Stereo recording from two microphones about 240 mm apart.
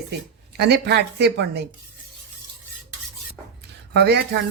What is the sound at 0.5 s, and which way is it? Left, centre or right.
Speech, right.